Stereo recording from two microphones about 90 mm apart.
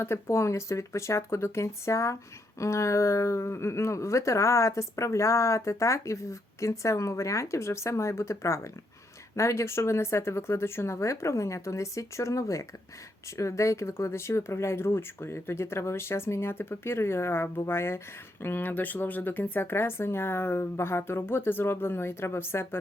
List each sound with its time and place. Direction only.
0.0 s speech: 30° left (ahead or behind)